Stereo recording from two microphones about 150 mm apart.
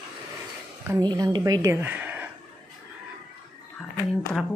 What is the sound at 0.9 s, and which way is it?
Speech, 25° right (ahead or behind).